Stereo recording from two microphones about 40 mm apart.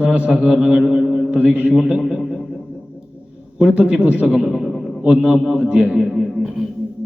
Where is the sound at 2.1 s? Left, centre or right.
Centre.